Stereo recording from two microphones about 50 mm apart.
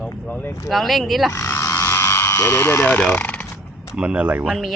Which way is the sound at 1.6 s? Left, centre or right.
Left.